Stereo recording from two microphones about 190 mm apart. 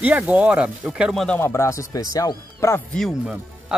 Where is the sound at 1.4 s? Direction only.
15° left (ahead or behind).